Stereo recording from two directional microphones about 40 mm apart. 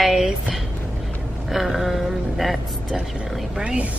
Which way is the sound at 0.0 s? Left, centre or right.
Centre.